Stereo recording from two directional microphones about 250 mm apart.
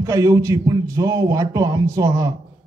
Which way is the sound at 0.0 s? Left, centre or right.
Centre.